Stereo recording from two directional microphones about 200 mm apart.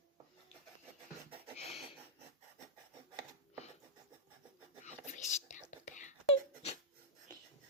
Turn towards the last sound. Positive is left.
turn(degrees=40)  # may be behind; listen again after turning